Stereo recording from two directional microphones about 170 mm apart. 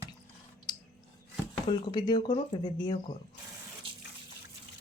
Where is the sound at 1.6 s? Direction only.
25° left (ahead or behind).